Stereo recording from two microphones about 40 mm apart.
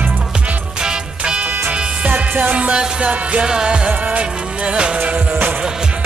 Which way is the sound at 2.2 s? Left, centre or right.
Right.